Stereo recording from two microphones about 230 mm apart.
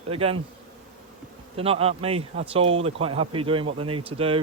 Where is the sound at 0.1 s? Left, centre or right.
Right.